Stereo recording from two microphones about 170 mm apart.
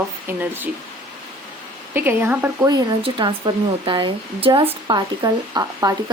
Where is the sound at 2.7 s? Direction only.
25° right (ahead or behind).